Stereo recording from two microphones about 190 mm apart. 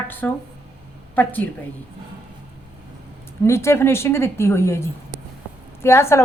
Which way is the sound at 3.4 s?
15° left (ahead or behind).